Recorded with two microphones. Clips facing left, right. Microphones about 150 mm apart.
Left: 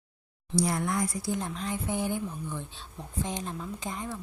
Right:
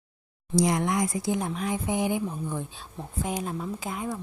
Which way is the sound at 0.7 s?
20° right (ahead or behind).